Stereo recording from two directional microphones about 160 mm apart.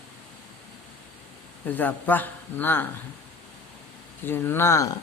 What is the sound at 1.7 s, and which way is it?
Speech, 10° left (ahead or behind).